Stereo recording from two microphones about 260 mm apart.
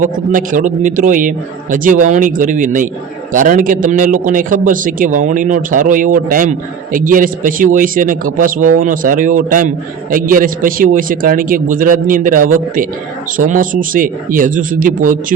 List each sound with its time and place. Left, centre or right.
0.0 s a man's voice: right